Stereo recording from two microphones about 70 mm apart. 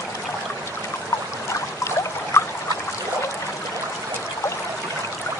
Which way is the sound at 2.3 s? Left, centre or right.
Left.